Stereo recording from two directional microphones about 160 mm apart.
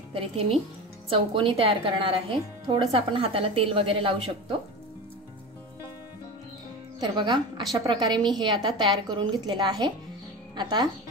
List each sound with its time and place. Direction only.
0.1 s speech: 35° right (ahead or behind)
7.0 s a woman's voice: 25° right (ahead or behind)